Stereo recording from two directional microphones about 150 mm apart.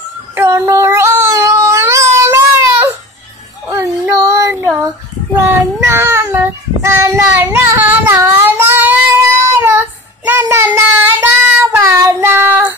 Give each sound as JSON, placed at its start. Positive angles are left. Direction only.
{"t": 0.3, "sound": "child singing", "side_deg": -15}
{"t": 3.6, "sound": "a sound", "side_deg": -20}
{"t": 5.8, "sound": "child singing", "side_deg": -15}